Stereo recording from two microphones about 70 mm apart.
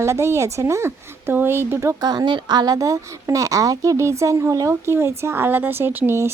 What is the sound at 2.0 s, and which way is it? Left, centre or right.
Speech, right.